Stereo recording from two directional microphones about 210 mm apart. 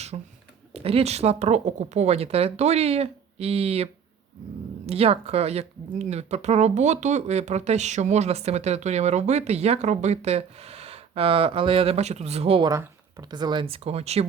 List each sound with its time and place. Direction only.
0.1 s speech: 30° right (ahead or behind)
4.9 s speech: 30° right (ahead or behind)